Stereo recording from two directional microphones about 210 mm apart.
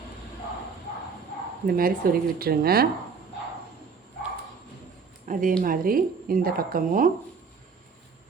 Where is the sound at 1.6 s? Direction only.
45° right (ahead or behind).